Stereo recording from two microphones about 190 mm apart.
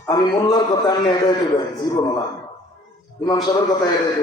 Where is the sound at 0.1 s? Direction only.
20° left (ahead or behind).